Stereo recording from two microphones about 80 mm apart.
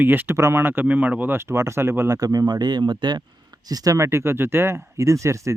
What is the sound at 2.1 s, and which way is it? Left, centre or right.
Speech, right.